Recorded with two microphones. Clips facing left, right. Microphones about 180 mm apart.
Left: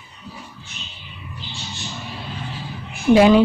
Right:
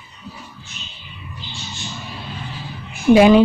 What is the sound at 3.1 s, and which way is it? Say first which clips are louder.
Speech: right 2 dB; 15° right (ahead or behind).